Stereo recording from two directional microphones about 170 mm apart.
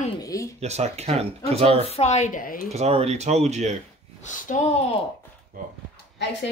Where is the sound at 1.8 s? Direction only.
40° left (ahead or behind).